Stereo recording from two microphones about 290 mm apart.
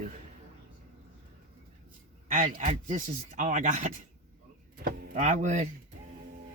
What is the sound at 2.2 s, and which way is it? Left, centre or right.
Speech, right.